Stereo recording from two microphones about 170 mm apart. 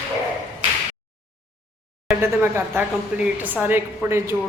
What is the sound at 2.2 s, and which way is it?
Speech, 10° right (ahead or behind).